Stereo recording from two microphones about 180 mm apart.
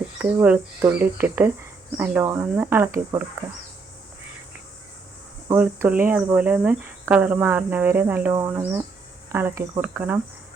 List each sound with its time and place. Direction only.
0.2 s speech: 10° right (ahead or behind)
5.5 s speech: 10° right (ahead or behind)